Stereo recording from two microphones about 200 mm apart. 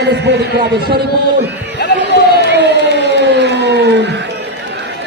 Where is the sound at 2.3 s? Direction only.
55° right (ahead or behind).